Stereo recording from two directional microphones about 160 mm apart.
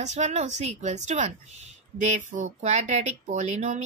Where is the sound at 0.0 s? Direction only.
45° right (ahead or behind).